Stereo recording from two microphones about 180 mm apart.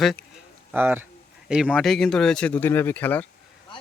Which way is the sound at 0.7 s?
10° right (ahead or behind).